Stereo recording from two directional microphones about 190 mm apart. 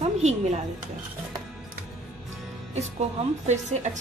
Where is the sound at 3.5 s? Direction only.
40° right (ahead or behind).